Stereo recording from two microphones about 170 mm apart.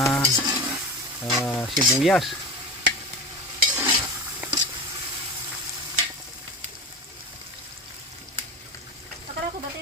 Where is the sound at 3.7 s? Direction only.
10° right (ahead or behind).